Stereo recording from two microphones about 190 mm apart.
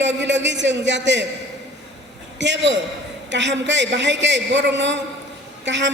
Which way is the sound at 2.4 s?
70° right (ahead or behind).